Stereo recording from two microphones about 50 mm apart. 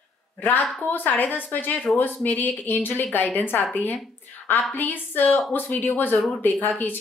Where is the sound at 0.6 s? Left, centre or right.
Left.